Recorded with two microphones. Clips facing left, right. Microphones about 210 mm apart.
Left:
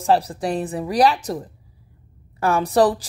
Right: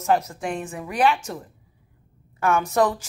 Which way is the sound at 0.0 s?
35° left (ahead or behind).